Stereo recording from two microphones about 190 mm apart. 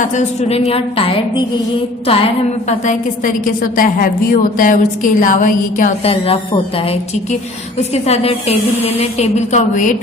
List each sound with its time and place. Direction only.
0.0 s a woman's voice: 35° left (ahead or behind)
6.1 s a woman's voice: 30° left (ahead or behind)
8.0 s a woman's voice: 35° left (ahead or behind)